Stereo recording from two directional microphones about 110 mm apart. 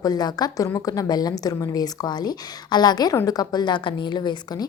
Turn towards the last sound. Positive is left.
turn(degrees=40)  # may be behind; listen again after turning